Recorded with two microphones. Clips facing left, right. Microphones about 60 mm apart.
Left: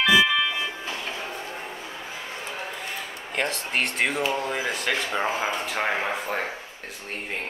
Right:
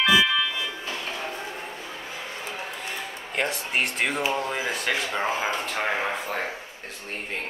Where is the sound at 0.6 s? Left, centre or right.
Left.